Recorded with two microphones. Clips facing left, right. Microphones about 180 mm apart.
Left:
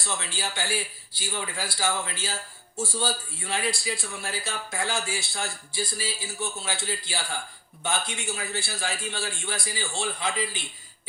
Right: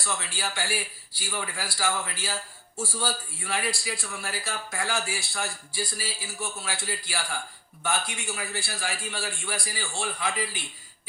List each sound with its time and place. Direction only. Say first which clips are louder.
0.0 s a man's voice: even; 25° left (ahead or behind)